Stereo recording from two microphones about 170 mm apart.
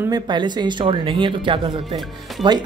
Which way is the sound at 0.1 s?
25° right (ahead or behind).